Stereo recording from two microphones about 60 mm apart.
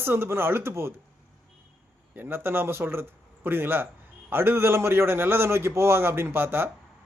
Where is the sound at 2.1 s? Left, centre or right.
Right.